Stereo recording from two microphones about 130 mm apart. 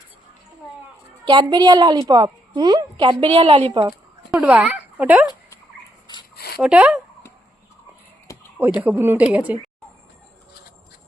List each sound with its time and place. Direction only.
1.2 s a woman's voice: 35° right (ahead or behind)
3.3 s a woman's voice: 50° right (ahead or behind)
4.3 s speech: 10° right (ahead or behind)
6.6 s speech: 10° right (ahead or behind)
8.5 s speech: 15° right (ahead or behind)